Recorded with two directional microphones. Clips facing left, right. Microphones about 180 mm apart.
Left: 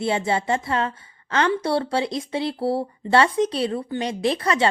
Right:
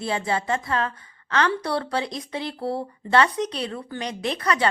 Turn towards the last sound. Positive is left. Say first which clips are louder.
# left 3 dB
turn(degrees=25)  # may be behind; listen again after turning